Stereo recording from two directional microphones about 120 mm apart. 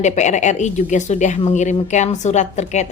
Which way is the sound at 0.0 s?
80° left.